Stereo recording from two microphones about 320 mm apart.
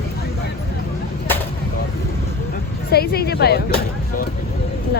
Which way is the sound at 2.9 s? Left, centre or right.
Left.